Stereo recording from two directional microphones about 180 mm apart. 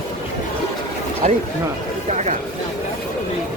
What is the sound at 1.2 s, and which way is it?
Speech, 40° right (ahead or behind).